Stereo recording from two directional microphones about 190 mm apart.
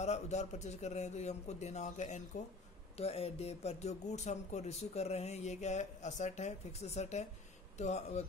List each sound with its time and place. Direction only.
0.0 s speech: 35° left (ahead or behind)